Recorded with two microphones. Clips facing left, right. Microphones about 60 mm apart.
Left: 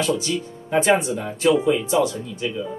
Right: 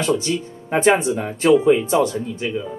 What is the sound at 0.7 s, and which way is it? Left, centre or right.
Speech, right.